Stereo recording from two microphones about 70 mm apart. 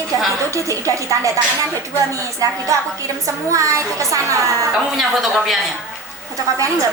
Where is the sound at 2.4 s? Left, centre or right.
Right.